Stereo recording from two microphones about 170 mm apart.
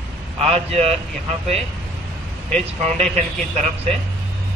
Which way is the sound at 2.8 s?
40° right (ahead or behind).